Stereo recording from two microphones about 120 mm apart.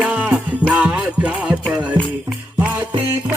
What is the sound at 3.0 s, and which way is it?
Music, 15° right (ahead or behind).